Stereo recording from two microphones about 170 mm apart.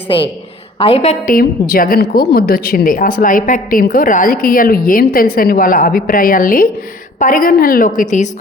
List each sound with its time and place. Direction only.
0.8 s a woman's voice: 35° left (ahead or behind)
1.3 s a woman's voice: 60° left (ahead or behind)